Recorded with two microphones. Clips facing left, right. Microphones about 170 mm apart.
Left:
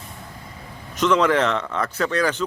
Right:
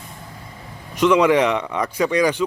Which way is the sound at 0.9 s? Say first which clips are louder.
Right 3 dB; 10° right (ahead or behind).